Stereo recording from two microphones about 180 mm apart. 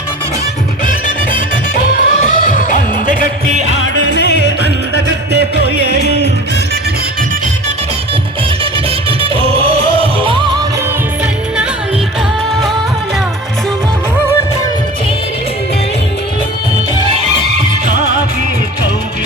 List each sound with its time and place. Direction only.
1.7 s music: 50° left (ahead or behind)
4.0 s music: 75° left (ahead or behind)
4.4 s music: 65° right (ahead or behind)
9.3 s music: 30° right (ahead or behind)